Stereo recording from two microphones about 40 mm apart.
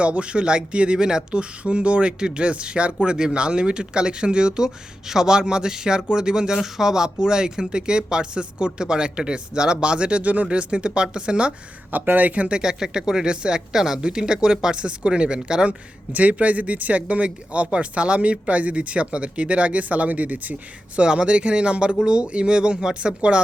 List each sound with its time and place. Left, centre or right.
0.0 s speech: right
11.9 s speech: right
16.1 s speech: right
20.9 s speech: right